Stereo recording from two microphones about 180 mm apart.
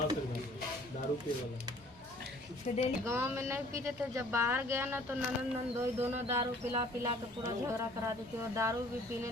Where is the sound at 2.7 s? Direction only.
40° left (ahead or behind).